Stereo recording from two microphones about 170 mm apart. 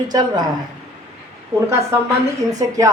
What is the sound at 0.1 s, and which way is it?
Speech, 25° right (ahead or behind).